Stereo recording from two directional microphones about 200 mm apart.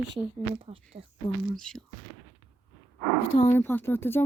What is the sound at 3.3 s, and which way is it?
Speech, 35° left (ahead or behind).